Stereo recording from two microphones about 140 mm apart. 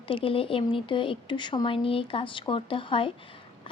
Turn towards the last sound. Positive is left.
turn(degrees=40)  # may be behind; listen again after turning